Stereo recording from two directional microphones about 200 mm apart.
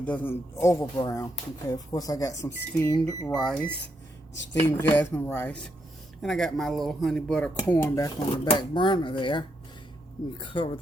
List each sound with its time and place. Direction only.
0.0 s speech: 10° left (ahead or behind)
3.3 s speech: 5° left (ahead or behind)
4.6 s speech: 10° left (ahead or behind); by 10.8 s 25° left (ahead or behind)